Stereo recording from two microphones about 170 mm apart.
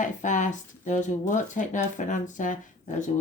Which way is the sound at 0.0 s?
45° left (ahead or behind).